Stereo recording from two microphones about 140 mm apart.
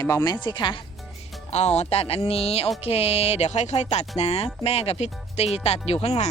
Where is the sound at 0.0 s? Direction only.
25° left (ahead or behind).